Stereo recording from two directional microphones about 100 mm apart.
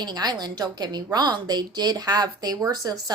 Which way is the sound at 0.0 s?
45° right (ahead or behind).